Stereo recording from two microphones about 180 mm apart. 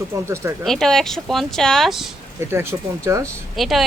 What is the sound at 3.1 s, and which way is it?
Speech, 15° right (ahead or behind).